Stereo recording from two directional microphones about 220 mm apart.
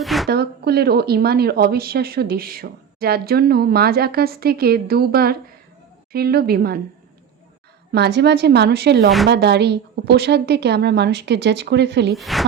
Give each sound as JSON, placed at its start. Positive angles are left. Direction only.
{"t": 0.0, "sound": "a sound", "side_deg": 0}
{"t": 0.3, "sound": "speech", "side_deg": -45}
{"t": 7.9, "sound": "speech", "side_deg": -50}
{"t": 12.1, "sound": "a woman's voice", "side_deg": 0}